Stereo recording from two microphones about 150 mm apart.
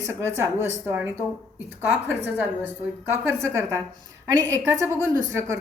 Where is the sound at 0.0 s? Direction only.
15° right (ahead or behind).